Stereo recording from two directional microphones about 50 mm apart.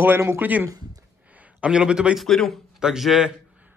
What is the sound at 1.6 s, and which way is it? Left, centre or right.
Speech, centre.